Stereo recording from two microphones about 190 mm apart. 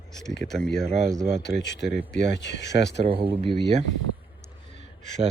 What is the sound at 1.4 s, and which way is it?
Speech, 65° left (ahead or behind).